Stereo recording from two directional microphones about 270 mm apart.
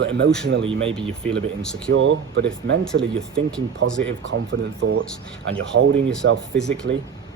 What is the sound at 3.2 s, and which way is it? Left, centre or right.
Speech, centre.